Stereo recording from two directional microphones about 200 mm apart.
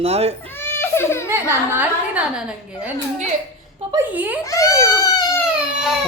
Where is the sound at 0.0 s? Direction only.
30° right (ahead or behind).